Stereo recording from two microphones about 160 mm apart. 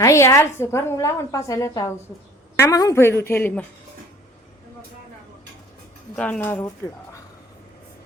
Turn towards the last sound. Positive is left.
turn(degrees=10)  # may be behind; listen again after turning